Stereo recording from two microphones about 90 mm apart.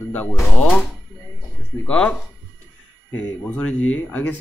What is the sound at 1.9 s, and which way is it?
Speech, 15° left (ahead or behind).